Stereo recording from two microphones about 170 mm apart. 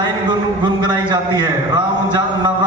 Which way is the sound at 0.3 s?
25° right (ahead or behind).